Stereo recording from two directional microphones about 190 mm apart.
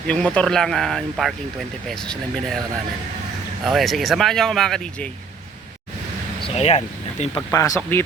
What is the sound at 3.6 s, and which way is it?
Speech, centre (ahead or behind).